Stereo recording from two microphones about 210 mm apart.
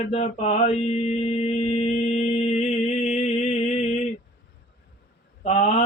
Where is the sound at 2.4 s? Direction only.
30° left (ahead or behind).